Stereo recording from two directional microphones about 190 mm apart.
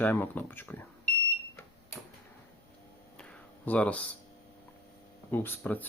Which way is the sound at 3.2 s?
5° left (ahead or behind).